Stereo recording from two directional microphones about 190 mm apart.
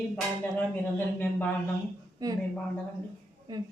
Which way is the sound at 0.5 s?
10° left (ahead or behind).